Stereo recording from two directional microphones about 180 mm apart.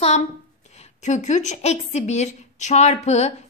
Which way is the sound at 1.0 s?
40° left (ahead or behind).